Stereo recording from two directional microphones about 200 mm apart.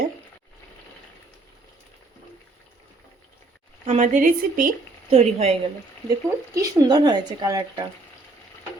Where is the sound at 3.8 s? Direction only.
35° right (ahead or behind).